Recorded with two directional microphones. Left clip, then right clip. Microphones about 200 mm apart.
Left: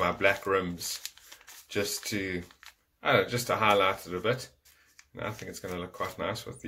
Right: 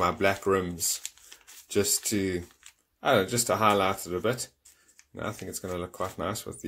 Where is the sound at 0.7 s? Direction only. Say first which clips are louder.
Right 4 dB; centre (ahead or behind).